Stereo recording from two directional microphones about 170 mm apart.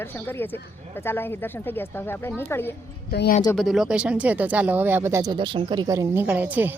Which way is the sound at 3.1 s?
75° left (ahead or behind).